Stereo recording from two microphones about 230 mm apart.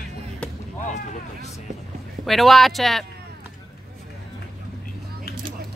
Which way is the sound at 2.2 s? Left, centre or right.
Centre.